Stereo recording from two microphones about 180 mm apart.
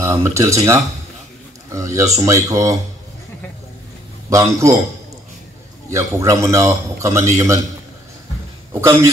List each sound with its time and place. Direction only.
0.0 s a man's voice: 15° right (ahead or behind)
4.3 s a man's voice: 15° right (ahead or behind)
5.9 s a man's voice: 15° right (ahead or behind)
8.8 s a man's voice: 15° right (ahead or behind)